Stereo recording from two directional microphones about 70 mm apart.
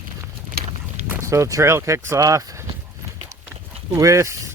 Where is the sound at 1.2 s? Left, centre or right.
Right.